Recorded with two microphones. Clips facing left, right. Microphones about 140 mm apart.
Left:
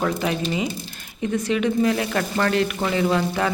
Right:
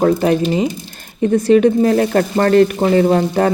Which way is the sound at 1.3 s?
40° right (ahead or behind).